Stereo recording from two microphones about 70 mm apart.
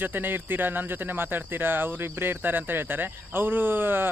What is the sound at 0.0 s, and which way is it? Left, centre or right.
Speech, right.